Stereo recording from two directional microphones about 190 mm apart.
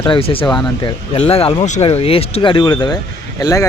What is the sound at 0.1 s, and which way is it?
Speech, 30° left (ahead or behind).